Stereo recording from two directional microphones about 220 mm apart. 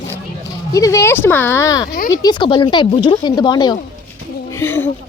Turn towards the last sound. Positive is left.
turn(degrees=10)  # may be behind; listen again after turning